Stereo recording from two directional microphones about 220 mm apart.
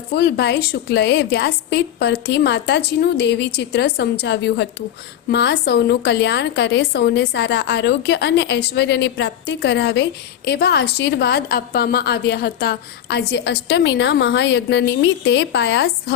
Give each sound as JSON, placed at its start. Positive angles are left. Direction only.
{"t": 0.2, "sound": "a woman's voice", "side_deg": 50}